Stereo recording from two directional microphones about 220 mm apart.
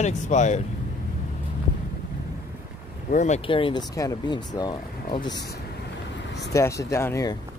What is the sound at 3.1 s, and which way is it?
Speech, 30° left (ahead or behind).